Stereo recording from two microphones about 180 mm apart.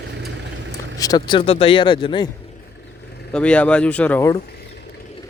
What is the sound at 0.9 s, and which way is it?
Speech, 20° left (ahead or behind).